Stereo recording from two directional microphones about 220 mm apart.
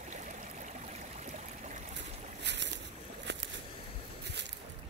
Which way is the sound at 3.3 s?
50° right (ahead or behind).